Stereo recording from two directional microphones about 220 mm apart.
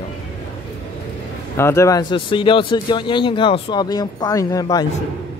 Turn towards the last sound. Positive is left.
turn(degrees=15)  # may be behind; listen again after turning